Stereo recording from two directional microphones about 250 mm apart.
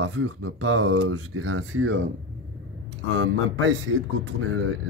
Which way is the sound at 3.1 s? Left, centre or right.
Right.